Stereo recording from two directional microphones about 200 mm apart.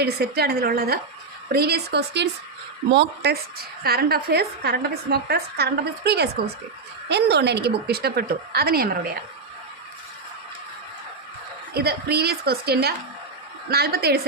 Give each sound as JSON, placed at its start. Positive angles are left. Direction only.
{"t": 0.0, "sound": "a woman's voice", "side_deg": -50}
{"t": 11.7, "sound": "a woman's voice", "side_deg": -50}